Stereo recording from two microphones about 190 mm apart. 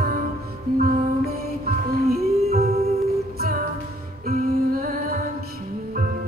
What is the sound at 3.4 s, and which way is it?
Music, 55° right (ahead or behind).